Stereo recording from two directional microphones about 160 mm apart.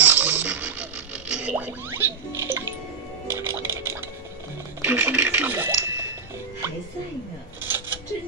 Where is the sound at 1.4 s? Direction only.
10° right (ahead or behind).